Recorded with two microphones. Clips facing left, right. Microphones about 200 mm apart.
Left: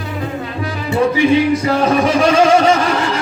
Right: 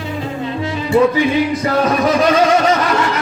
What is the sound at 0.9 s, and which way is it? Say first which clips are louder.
Music: even; 30° left (ahead or behind).